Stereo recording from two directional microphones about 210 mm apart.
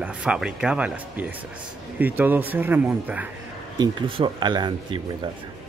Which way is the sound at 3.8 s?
25° right (ahead or behind).